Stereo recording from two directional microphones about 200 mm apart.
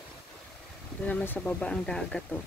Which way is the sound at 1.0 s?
10° left (ahead or behind).